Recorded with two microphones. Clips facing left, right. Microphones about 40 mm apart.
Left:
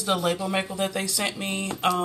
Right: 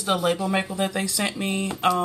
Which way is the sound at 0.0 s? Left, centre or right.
Centre.